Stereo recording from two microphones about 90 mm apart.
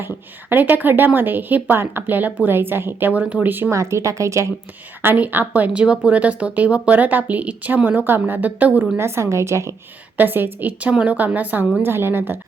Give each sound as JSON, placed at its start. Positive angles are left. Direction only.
{"t": 0.5, "sound": "speech", "side_deg": -20}
{"t": 3.8, "sound": "a woman's voice", "side_deg": -35}
{"t": 5.0, "sound": "speech", "side_deg": -20}
{"t": 9.0, "sound": "a woman's voice", "side_deg": -30}
{"t": 10.2, "sound": "speech", "side_deg": -20}